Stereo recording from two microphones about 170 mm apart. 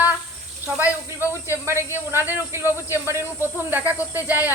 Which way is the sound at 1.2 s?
15° right (ahead or behind).